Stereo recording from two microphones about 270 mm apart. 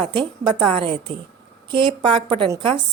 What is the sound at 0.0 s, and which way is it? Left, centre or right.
A woman's voice, centre.